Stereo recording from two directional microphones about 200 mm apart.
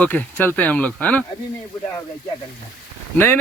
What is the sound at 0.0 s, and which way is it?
Speech, 10° left (ahead or behind).